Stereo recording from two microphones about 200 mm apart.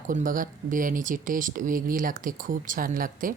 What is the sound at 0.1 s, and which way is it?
Speech, 40° right (ahead or behind).